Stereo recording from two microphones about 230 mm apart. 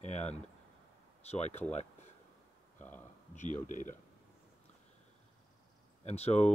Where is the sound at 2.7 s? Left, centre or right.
Centre.